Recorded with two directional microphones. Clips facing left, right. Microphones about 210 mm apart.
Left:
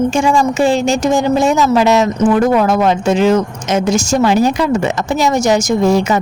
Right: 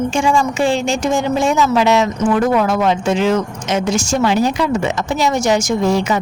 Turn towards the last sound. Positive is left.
turn(degrees=45)  # may be behind; listen again after turning